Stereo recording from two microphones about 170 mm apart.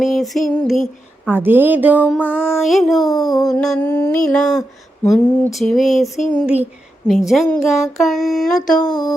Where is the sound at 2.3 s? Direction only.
15° left (ahead or behind).